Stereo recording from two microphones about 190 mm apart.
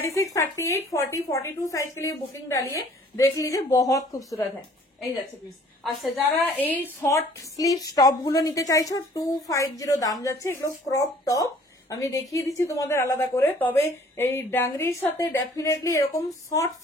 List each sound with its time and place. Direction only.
0.1 s a woman's voice: 15° left (ahead or behind)
5.9 s a woman's voice: 5° left (ahead or behind)